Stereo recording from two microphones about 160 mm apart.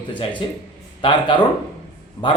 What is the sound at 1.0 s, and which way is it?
Speech, 30° left (ahead or behind).